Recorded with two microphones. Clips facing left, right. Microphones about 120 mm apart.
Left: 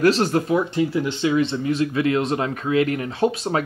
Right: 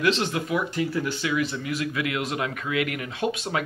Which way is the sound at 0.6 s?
20° left (ahead or behind).